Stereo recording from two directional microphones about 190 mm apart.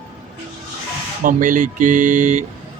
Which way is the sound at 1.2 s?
45° right (ahead or behind).